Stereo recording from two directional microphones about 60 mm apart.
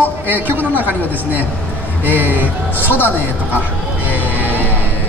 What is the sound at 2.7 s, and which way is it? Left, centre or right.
Speech, left.